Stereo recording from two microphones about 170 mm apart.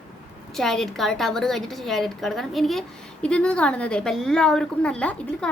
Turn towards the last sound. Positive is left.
turn(degrees=5)  # may be behind; listen again after turning